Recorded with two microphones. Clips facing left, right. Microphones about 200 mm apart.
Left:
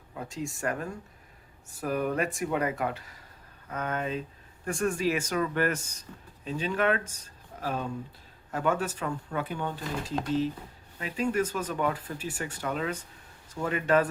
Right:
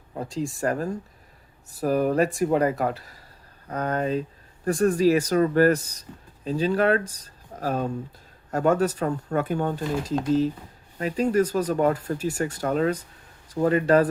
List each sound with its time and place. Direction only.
0.1 s speech: 35° right (ahead or behind)